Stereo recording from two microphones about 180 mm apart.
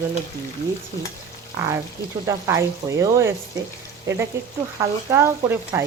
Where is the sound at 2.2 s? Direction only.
15° right (ahead or behind).